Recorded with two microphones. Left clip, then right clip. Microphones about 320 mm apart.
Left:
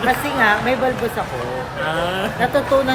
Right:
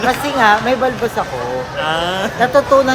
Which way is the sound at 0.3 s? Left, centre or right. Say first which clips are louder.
Right 6 dB; centre.